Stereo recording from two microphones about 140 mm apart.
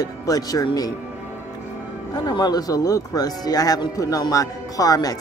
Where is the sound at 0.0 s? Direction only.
25° left (ahead or behind).